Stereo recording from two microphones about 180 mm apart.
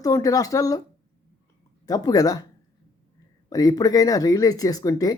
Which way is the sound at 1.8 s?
20° left (ahead or behind).